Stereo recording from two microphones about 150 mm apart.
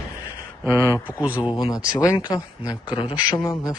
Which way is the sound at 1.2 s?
10° right (ahead or behind).